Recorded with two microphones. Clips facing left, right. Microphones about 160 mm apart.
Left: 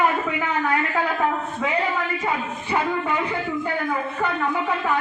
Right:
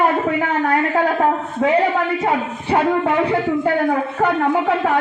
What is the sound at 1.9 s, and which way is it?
A woman's voice, 65° right (ahead or behind).